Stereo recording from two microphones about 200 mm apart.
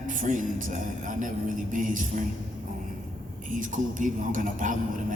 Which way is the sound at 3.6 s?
40° right (ahead or behind).